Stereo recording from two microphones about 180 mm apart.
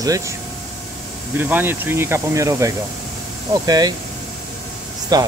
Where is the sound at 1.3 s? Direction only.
10° right (ahead or behind).